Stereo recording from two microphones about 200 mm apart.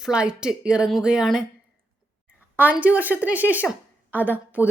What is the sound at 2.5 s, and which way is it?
A woman's voice, 10° right (ahead or behind).